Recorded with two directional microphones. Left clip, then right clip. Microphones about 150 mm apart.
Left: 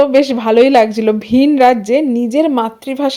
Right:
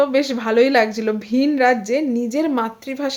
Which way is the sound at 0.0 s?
30° left (ahead or behind).